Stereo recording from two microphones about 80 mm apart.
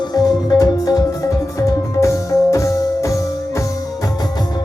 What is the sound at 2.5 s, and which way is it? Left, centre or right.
Music, left.